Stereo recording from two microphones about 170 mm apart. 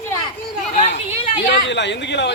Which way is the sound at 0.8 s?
45° left (ahead or behind).